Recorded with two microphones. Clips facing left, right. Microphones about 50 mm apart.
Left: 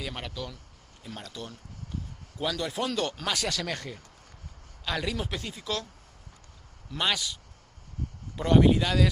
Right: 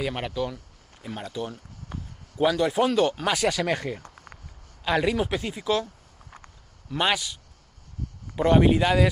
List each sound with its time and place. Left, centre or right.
0.0 s speech: right
4.0 s a sound: right
4.8 s speech: right
6.9 s speech: right
8.4 s speech: right